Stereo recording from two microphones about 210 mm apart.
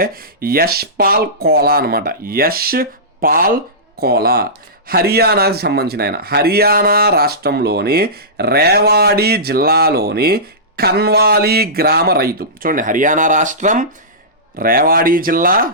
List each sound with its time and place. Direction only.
0.0 s speech: 45° right (ahead or behind)